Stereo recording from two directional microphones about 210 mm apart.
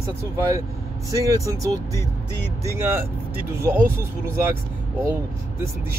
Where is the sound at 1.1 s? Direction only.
15° right (ahead or behind).